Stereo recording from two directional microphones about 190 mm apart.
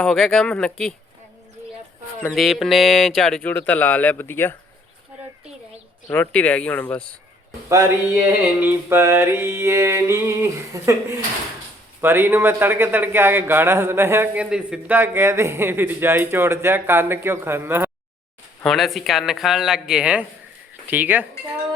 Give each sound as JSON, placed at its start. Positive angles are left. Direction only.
{"t": 0.0, "sound": "speech", "side_deg": 5}
{"t": 2.2, "sound": "speech", "side_deg": 0}
{"t": 6.1, "sound": "speech", "side_deg": 5}
{"t": 8.1, "sound": "a man's voice", "side_deg": -10}
{"t": 18.6, "sound": "speech", "side_deg": 0}